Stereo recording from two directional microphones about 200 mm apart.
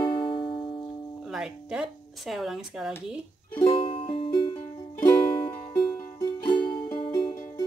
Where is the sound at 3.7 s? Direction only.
25° left (ahead or behind).